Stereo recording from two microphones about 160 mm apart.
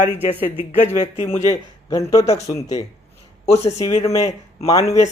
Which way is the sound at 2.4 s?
20° left (ahead or behind).